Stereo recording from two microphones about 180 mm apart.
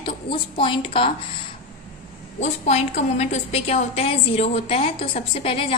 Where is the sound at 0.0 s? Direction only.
30° left (ahead or behind).